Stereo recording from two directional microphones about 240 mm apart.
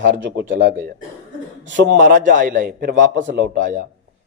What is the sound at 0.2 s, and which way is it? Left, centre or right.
Speech, right.